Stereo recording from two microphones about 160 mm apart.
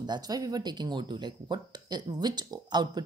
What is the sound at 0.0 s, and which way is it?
A woman's voice, 25° right (ahead or behind).